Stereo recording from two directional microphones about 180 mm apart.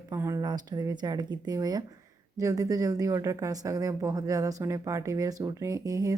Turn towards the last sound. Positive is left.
turn(degrees=-20)  # may be behind; listen again after turning